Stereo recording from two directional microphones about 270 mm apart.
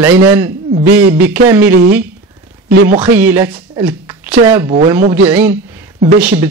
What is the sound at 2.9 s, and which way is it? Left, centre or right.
Speech, centre.